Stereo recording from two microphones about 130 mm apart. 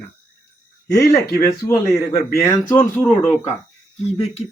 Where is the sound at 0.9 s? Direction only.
25° left (ahead or behind).